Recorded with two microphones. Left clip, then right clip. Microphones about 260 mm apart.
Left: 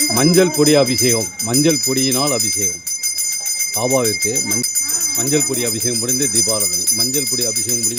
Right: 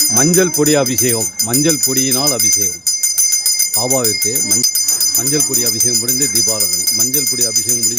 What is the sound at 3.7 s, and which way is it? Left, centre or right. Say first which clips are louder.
Speech: right 1 dB; centre.